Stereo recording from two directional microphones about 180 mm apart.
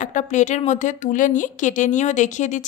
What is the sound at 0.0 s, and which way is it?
A woman's voice, 40° left (ahead or behind).